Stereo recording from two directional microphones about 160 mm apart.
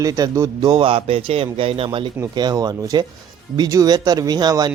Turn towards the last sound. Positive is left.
turn(degrees=-25)  # may be behind; listen again after turning